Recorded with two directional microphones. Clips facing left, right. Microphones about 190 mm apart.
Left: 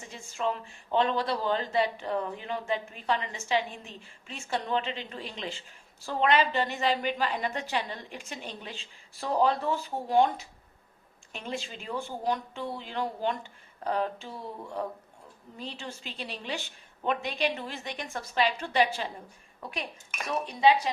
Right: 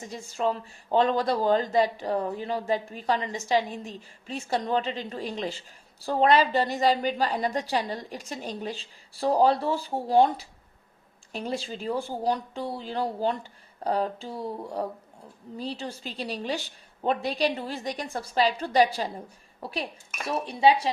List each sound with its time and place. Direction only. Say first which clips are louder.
0.0 s speech: right 4 dB; 40° right (ahead or behind)